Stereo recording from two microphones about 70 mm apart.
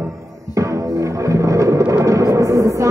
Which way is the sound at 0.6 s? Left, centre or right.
Right.